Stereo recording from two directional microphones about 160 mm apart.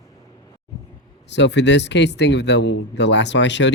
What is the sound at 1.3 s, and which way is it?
Speech, 90° left.